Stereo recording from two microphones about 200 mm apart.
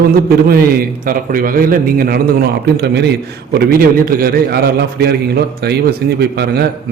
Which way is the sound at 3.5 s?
45° right (ahead or behind).